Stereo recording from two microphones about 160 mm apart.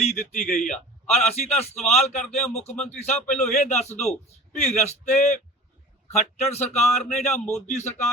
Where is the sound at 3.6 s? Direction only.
45° left (ahead or behind).